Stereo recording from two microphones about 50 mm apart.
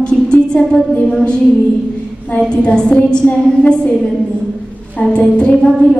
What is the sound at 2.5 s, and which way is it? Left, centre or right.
A woman's voice, centre.